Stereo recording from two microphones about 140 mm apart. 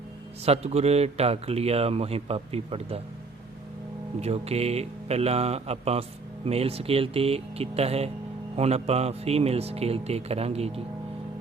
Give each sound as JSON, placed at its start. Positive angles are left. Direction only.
{"t": 0.4, "sound": "speech", "side_deg": -50}
{"t": 4.2, "sound": "speech", "side_deg": -50}